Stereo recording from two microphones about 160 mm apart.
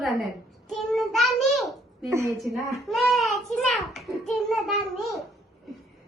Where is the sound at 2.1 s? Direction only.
15° right (ahead or behind).